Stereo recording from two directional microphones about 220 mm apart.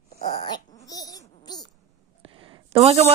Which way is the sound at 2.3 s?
25° right (ahead or behind).